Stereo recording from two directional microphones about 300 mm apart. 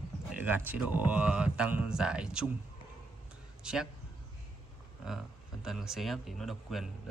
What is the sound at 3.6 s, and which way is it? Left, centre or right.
Speech, centre.